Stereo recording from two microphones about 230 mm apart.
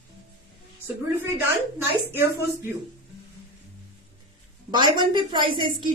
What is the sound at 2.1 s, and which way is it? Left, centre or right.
Speech, centre.